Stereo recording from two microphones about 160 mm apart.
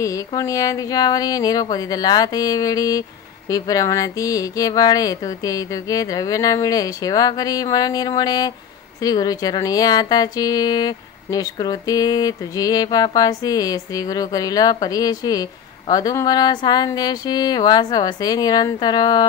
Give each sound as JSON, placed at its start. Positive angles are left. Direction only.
{"t": 0.0, "sound": "speech", "side_deg": 20}